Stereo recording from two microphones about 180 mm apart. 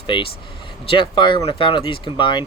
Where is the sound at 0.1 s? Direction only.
25° left (ahead or behind).